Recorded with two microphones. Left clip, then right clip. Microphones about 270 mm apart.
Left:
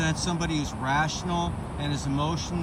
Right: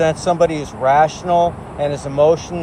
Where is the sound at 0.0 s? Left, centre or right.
Centre.